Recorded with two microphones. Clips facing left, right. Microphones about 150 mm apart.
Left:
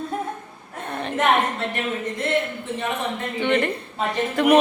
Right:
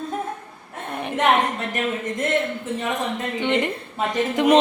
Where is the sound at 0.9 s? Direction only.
10° right (ahead or behind).